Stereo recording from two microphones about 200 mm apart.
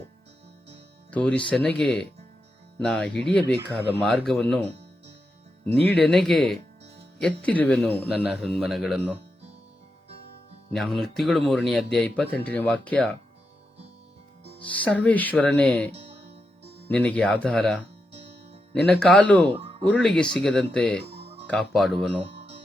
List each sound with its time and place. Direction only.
1.1 s speech: 5° left (ahead or behind)
5.7 s speech: centre (ahead or behind)
10.7 s speech: centre (ahead or behind)
14.6 s speech: 5° left (ahead or behind)
15.9 s music: 30° right (ahead or behind)
16.9 s speech: 5° left (ahead or behind)
21.0 s music: 30° right (ahead or behind)
21.4 s speech: centre (ahead or behind)